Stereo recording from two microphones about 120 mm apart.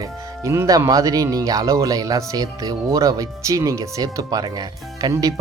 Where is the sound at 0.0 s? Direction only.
25° right (ahead or behind).